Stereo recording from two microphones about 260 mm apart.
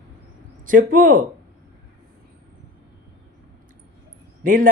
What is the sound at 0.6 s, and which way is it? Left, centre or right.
Speech, right.